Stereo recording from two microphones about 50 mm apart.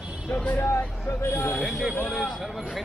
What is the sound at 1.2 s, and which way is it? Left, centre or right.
Speech, left.